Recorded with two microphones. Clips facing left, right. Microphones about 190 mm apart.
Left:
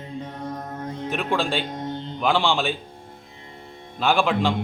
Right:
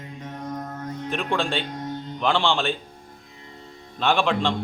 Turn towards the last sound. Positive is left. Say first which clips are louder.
# left 1 dB
turn(degrees=0)  # may be behind; listen again after turning